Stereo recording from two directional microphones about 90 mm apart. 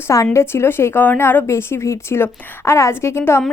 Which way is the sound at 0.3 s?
30° left (ahead or behind).